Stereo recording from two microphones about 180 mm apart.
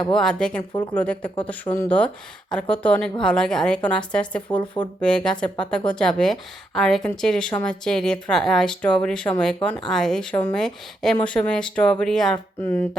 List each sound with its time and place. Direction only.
0.1 s a woman's voice: 5° left (ahead or behind)
4.5 s speech: 25° left (ahead or behind)
4.9 s speech: 5° left (ahead or behind)